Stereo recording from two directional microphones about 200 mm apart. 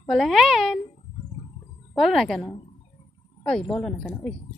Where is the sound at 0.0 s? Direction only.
Centre (ahead or behind).